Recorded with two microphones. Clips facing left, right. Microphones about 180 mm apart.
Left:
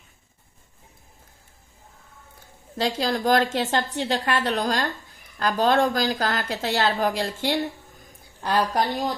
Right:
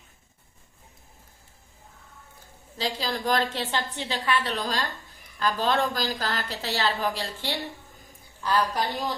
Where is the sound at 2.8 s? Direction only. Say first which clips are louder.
Left 6 dB; 50° left (ahead or behind).